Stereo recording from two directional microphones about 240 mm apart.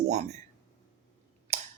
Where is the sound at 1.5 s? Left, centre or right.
Right.